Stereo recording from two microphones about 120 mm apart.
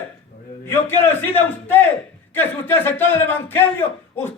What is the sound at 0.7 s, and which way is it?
A man's voice, 20° left (ahead or behind).